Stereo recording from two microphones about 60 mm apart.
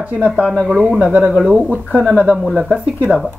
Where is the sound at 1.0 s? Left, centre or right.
Right.